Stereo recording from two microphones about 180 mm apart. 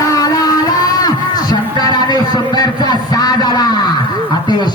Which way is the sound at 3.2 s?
20° left (ahead or behind).